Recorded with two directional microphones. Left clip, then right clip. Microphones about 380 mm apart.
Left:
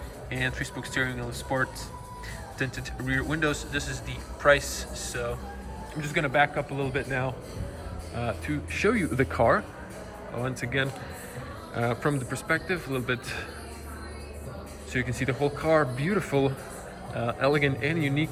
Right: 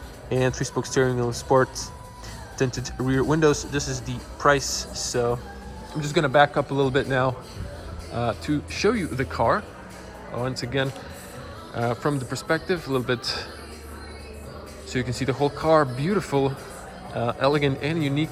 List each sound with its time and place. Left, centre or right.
0.3 s a man's voice: centre
2.6 s a man's voice: centre
6.5 s a man's voice: centre
6.8 s a man's voice: right
8.1 s a man's voice: centre
14.9 s a man's voice: centre